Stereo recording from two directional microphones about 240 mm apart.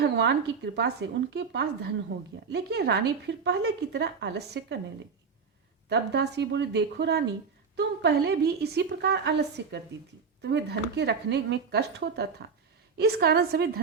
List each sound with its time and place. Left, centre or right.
0.0 s speech: right
5.9 s a woman's voice: right